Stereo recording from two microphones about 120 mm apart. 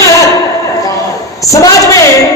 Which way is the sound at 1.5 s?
30° left (ahead or behind).